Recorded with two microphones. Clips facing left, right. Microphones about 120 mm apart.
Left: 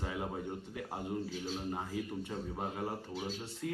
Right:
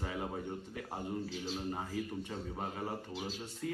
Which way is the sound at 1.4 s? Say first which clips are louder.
Even; 5° left (ahead or behind).